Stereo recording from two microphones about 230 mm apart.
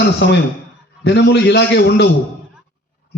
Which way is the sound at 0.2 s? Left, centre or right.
Left.